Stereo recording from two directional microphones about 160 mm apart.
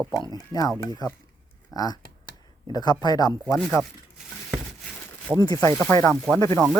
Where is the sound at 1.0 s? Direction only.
25° left (ahead or behind).